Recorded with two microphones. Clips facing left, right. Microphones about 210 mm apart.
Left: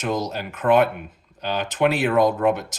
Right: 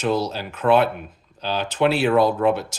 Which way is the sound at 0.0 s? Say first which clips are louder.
Right 3 dB; 15° left (ahead or behind).